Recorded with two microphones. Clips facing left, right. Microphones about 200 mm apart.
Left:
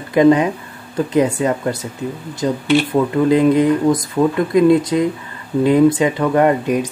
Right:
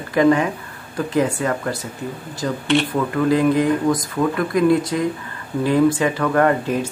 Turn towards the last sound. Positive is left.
turn(degrees=20)  # may be behind; listen again after turning